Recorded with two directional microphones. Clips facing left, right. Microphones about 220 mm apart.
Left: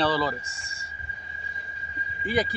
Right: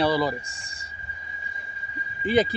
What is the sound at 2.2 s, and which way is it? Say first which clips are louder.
Speech: right 5 dB; 25° right (ahead or behind).